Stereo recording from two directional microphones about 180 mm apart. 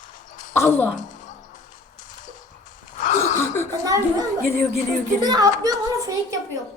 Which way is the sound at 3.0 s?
40° left (ahead or behind).